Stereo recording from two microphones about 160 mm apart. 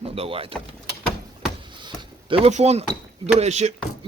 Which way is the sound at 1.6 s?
30° right (ahead or behind).